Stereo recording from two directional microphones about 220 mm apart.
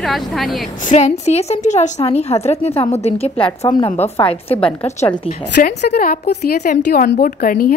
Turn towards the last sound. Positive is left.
turn(degrees=40)  # may be behind; listen again after turning